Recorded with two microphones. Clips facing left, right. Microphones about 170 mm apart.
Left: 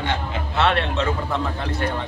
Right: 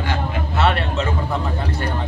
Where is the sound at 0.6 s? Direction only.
5° right (ahead or behind).